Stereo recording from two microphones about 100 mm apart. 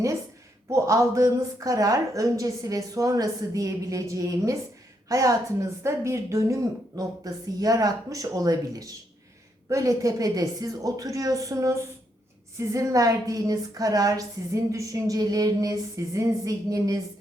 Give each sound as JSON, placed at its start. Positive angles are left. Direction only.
{"t": 0.7, "sound": "a woman's voice", "side_deg": -30}